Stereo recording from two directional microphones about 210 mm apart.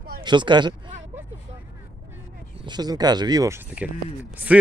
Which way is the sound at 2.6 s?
20° right (ahead or behind).